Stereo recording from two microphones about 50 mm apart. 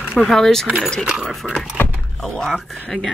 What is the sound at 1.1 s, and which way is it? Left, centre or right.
Speech, centre.